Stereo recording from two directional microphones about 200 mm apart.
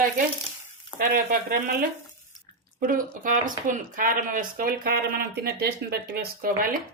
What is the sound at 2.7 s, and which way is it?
Speech, 45° right (ahead or behind).